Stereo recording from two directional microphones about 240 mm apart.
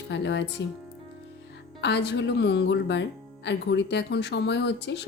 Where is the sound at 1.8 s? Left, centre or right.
Left.